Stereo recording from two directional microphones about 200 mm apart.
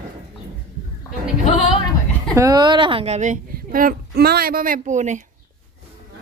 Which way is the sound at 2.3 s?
15° right (ahead or behind).